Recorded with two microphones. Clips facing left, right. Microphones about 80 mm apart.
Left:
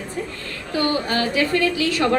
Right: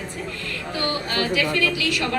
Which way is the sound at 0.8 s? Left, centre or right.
Left.